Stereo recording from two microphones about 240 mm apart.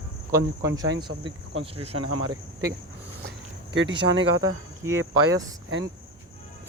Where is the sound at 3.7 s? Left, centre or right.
Right.